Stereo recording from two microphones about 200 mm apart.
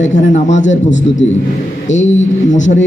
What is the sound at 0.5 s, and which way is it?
A man's voice, 65° left (ahead or behind).